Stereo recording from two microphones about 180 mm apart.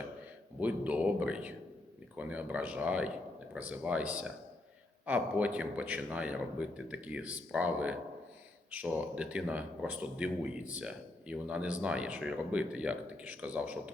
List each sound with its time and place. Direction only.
0.6 s speech: 10° right (ahead or behind)